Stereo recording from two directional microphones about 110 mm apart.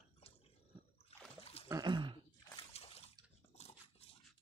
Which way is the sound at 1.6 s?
35° right (ahead or behind).